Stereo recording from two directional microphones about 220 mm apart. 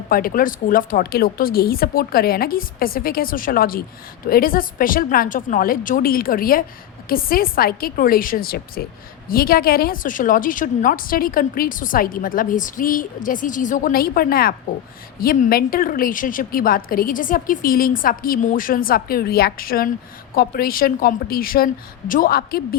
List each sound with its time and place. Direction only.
0.1 s a woman's voice: 40° left (ahead or behind)